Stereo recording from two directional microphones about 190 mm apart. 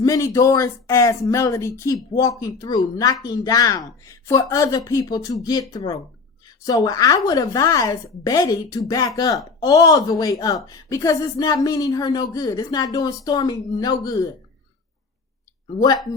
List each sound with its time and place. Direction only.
0.0 s a woman's voice: 15° left (ahead or behind)